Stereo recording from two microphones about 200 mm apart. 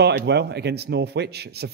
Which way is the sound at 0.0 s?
55° right (ahead or behind).